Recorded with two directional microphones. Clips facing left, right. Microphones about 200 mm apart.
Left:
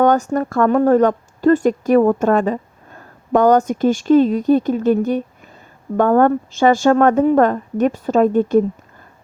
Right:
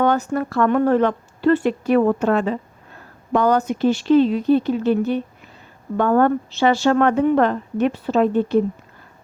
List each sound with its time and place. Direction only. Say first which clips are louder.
0.0 s a woman's voice: left 4 dB; 45° left (ahead or behind)